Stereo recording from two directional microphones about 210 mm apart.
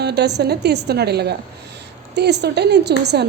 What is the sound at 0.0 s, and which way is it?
A woman's voice, 50° right (ahead or behind).